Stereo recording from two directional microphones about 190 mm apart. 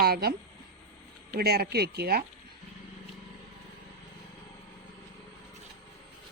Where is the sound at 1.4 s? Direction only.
55° right (ahead or behind).